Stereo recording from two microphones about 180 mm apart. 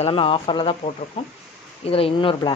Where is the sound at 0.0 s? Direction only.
30° left (ahead or behind).